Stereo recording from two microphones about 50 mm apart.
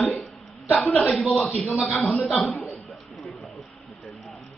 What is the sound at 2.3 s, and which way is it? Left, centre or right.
Speech, centre.